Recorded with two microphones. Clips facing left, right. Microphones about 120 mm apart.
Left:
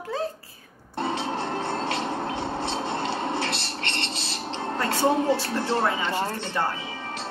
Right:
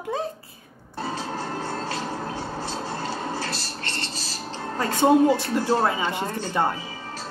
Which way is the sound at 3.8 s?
25° left (ahead or behind).